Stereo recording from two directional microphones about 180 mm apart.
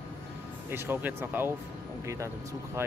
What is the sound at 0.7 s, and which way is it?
Speech, 10° right (ahead or behind).